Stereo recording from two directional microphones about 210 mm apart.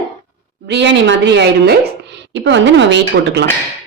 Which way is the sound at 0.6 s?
55° right (ahead or behind).